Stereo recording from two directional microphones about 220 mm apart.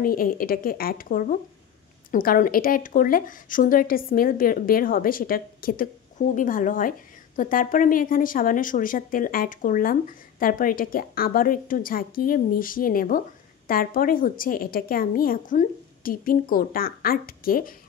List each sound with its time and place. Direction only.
0.0 s speech: 40° left (ahead or behind)